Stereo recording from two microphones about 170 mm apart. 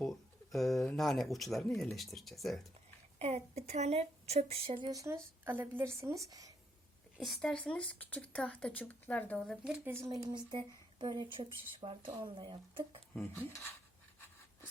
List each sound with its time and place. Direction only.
0.5 s speech: centre (ahead or behind)
3.2 s a woman's voice: 40° right (ahead or behind); by 6.5 s 20° right (ahead or behind)
7.2 s a woman's voice: 5° left (ahead or behind); by 13.0 s 30° right (ahead or behind)
13.3 s speech: 15° left (ahead or behind)